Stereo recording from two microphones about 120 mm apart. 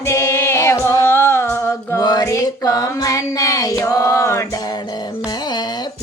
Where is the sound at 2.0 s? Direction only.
35° left (ahead or behind).